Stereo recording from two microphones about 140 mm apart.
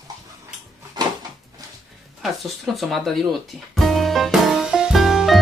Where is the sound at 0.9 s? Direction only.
30° right (ahead or behind).